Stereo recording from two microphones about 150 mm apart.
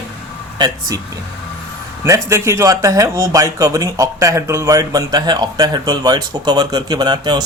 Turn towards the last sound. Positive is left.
turn(degrees=-30)  # may be behind; listen again after turning